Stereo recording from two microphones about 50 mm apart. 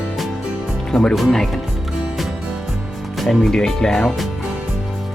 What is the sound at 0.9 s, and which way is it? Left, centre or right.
Speech, centre.